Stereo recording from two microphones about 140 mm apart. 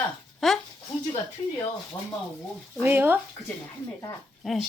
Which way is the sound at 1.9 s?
20° left (ahead or behind).